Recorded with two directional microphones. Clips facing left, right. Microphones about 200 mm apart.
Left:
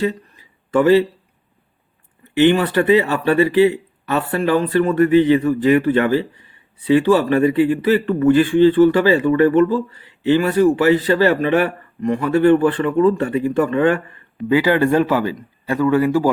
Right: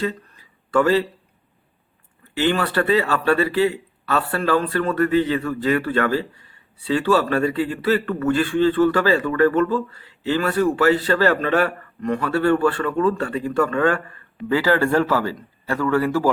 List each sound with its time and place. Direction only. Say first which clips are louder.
0.7 s speech: left 5 dB; 20° left (ahead or behind)
2.3 s speech: left 6 dB; 15° left (ahead or behind)